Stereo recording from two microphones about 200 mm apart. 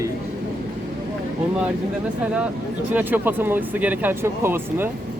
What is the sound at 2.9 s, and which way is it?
Speech, 10° right (ahead or behind).